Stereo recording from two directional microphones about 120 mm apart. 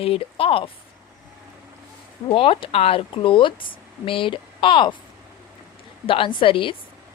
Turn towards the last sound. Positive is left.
turn(degrees=45)  # may be behind; listen again after turning